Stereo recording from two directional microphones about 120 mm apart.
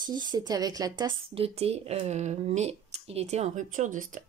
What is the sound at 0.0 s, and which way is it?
Speech, 40° right (ahead or behind).